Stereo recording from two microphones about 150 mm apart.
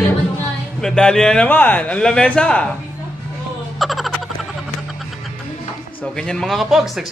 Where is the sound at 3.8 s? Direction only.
Centre (ahead or behind).